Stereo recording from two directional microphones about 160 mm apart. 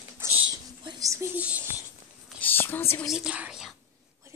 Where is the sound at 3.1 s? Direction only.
5° right (ahead or behind).